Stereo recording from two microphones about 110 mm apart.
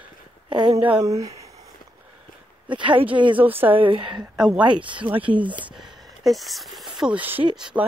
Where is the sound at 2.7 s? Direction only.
50° right (ahead or behind).